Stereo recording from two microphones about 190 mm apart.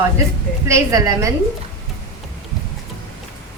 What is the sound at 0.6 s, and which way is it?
Speech, 15° right (ahead or behind).